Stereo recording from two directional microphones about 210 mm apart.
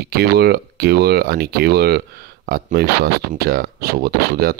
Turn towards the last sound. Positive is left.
turn(degrees=-45)  # may be behind; listen again after turning